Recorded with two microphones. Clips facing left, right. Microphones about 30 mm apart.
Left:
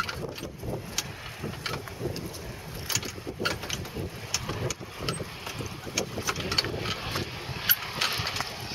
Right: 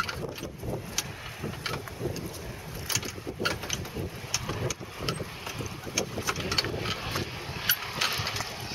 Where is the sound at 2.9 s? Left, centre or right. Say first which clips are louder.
Even; centre.